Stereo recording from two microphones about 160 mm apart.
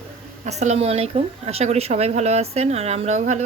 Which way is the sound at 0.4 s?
45° right (ahead or behind).